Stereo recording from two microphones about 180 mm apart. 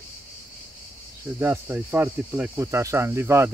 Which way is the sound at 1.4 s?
10° right (ahead or behind).